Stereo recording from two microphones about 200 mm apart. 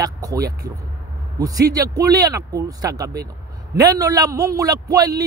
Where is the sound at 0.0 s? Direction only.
15° right (ahead or behind).